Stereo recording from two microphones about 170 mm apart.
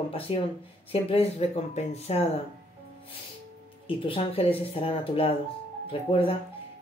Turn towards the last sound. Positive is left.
turn(degrees=30)  # may be behind; listen again after turning